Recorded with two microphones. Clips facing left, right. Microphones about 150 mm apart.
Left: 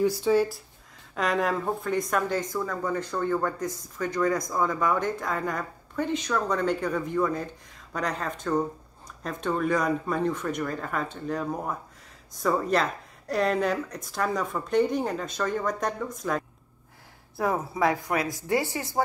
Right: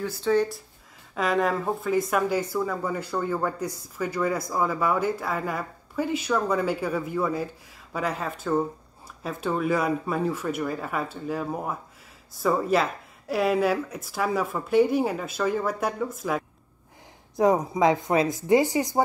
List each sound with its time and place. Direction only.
0.0 s speech: 15° left (ahead or behind); by 16.4 s 5° right (ahead or behind)
17.4 s speech: 20° right (ahead or behind)